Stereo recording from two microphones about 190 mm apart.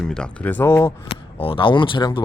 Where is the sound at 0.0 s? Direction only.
5° left (ahead or behind).